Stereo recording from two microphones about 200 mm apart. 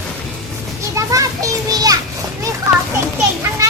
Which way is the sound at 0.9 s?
15° right (ahead or behind).